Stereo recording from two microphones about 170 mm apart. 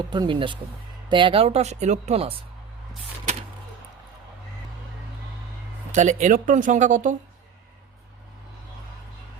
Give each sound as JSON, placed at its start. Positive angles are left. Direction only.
{"t": 0.1, "sound": "speech", "side_deg": -30}
{"t": 5.9, "sound": "speech", "side_deg": -45}